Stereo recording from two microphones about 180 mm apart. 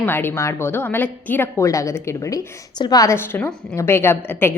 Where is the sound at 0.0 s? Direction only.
10° left (ahead or behind).